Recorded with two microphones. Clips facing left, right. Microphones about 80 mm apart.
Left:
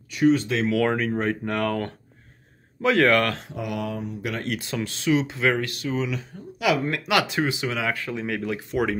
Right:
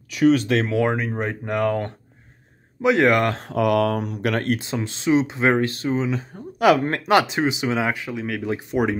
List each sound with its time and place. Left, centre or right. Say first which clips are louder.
0.1 s speech: right 3 dB; right
0.8 s speech: even; centre
3.4 s speech: right 10 dB; right
4.6 s speech: right 2 dB; right
7.1 s speech: right 5 dB; right
8.1 s speech: right 1 dB; centre
8.5 s speech: right 4 dB; right